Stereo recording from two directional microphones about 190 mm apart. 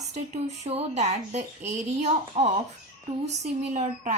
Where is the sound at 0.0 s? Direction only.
35° right (ahead or behind).